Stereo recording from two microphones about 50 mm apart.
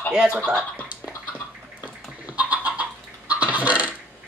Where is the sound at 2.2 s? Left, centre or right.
Right.